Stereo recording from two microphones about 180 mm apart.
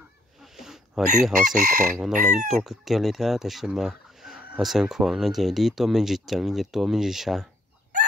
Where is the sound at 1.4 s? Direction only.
45° right (ahead or behind).